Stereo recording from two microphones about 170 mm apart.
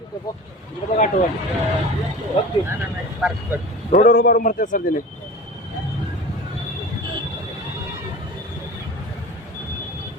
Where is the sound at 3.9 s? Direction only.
60° left (ahead or behind).